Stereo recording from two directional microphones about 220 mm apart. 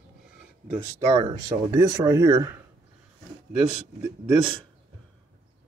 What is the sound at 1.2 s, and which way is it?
Speech, 20° right (ahead or behind).